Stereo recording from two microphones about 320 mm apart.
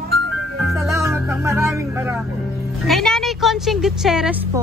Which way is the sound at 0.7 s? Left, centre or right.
Centre.